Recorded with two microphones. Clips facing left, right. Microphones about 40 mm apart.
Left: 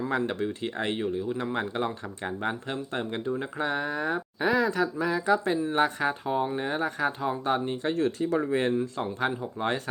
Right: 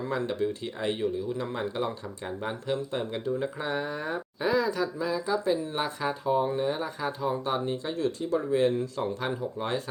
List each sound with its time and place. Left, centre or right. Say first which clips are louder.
0.1 s speech: right 2 dB; left
7.9 s speech: left 2 dB; left
8.8 s speech: left 2 dB; left
9.6 s speech: left 4 dB; left